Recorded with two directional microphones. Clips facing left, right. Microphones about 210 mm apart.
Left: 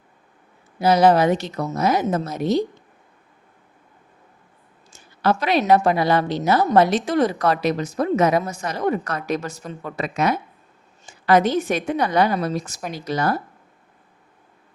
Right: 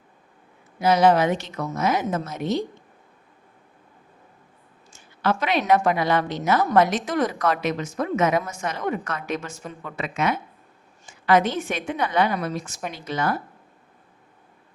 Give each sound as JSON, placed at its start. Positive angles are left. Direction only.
{"t": 0.8, "sound": "a woman's voice", "side_deg": 35}
{"t": 4.9, "sound": "a woman's voice", "side_deg": 40}